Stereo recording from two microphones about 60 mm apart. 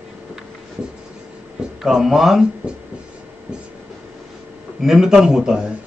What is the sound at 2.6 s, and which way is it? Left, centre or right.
Speech, centre.